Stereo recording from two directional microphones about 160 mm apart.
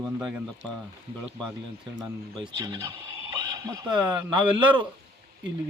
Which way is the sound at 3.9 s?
10° right (ahead or behind).